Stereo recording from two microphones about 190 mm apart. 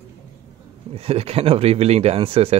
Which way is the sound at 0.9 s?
30° right (ahead or behind).